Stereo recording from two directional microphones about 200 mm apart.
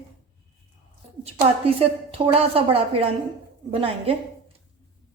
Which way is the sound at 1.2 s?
30° right (ahead or behind).